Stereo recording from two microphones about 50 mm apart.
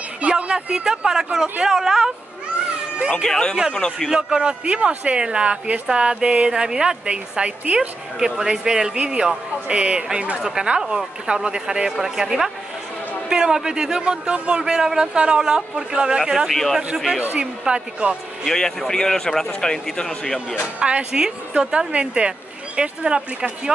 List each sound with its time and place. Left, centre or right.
0.2 s a man's voice: right
3.3 s speech: centre
4.1 s speech: centre
8.2 s a man's voice: centre
14.6 s a man's voice: centre
16.4 s speech: centre
16.7 s a man's voice: centre
17.4 s speech: centre
18.5 s speech: centre
20.6 s speech: right